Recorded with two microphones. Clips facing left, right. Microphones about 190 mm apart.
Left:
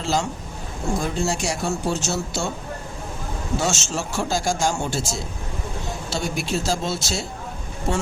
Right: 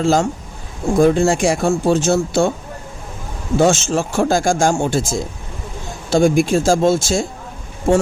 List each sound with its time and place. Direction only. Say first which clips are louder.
0.0 s a man's voice: right 8 dB; 50° right (ahead or behind)
3.6 s a man's voice: right 13 dB; 55° right (ahead or behind)